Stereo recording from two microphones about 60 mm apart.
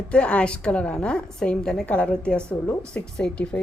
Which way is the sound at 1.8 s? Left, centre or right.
Left.